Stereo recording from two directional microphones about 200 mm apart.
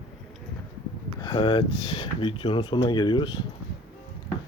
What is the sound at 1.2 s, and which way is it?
Speech, 25° left (ahead or behind).